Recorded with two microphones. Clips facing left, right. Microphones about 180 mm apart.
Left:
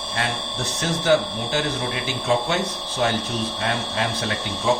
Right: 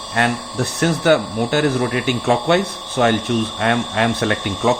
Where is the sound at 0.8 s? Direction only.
65° right (ahead or behind).